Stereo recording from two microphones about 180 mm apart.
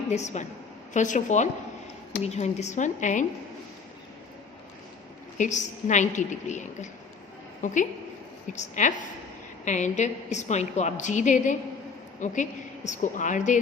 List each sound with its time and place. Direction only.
0.1 s a woman's voice: 40° left (ahead or behind)
5.4 s a woman's voice: 40° left (ahead or behind)